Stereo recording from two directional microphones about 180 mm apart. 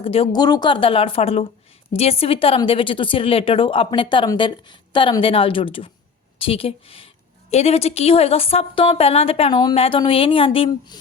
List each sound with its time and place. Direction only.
0.0 s a woman's voice: 30° left (ahead or behind)